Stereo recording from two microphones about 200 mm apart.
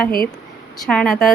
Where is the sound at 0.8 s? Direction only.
5° left (ahead or behind).